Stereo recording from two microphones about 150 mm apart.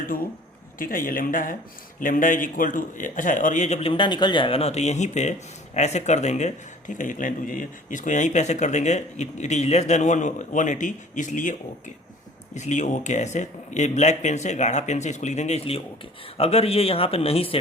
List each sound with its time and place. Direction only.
0.8 s speech: 65° left (ahead or behind)
12.5 s a man's voice: 50° left (ahead or behind)